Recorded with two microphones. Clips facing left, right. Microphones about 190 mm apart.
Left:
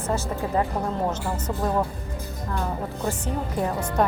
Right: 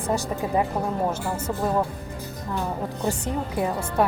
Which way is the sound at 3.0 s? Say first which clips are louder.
Right 2 dB; 10° right (ahead or behind).